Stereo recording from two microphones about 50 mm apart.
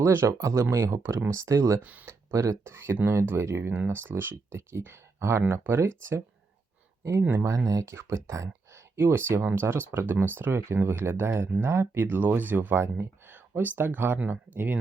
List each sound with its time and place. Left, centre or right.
0.1 s speech: right
1.8 s speech: right
2.0 s speech: right
4.9 s speech: right
5.6 s speech: right
7.2 s speech: right
7.4 s speech: right
9.0 s speech: right
13.0 s a sound: right
13.5 s speech: right